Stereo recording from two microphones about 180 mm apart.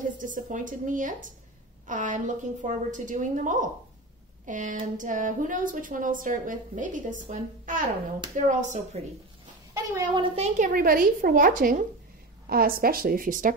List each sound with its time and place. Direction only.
0.0 s a woman's voice: 45° right (ahead or behind)
9.8 s speech: 15° right (ahead or behind)
10.2 s speech: 35° right (ahead or behind)